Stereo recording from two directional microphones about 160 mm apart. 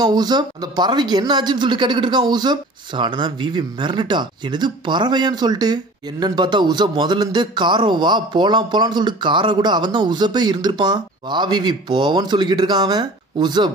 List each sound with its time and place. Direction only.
0.0 s speech: 25° right (ahead or behind)